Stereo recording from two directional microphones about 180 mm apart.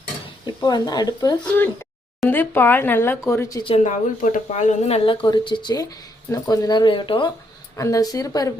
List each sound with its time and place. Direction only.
0.4 s speech: 20° left (ahead or behind)
1.5 s speech: 10° left (ahead or behind)
3.8 s speech: 45° left (ahead or behind); by 8.5 s 20° left (ahead or behind)